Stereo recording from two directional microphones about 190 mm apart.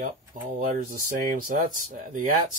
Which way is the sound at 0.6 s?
45° right (ahead or behind).